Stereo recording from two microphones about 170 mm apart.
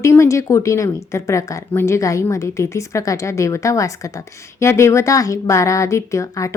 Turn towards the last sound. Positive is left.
turn(degrees=20)  # may be behind; listen again after turning